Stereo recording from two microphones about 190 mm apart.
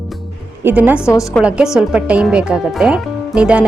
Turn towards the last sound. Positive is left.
turn(degrees=-5)  # may be behind; listen again after turning